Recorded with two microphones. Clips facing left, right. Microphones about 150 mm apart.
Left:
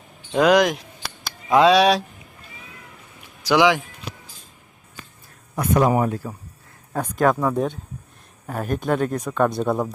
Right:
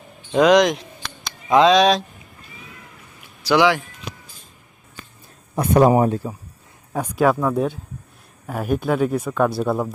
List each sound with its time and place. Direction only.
0.3 s speech: 5° left (ahead or behind)
3.4 s speech: 15° left (ahead or behind)
5.5 s speech: 30° right (ahead or behind)
6.9 s speech: 10° right (ahead or behind)